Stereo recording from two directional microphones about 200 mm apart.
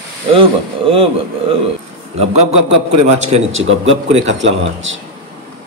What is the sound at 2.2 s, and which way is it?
A man's voice, 35° right (ahead or behind).